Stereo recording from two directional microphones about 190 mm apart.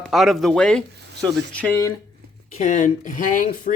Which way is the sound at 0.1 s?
Centre (ahead or behind).